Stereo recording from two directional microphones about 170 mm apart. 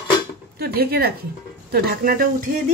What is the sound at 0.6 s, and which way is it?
A woman's voice, 65° right (ahead or behind).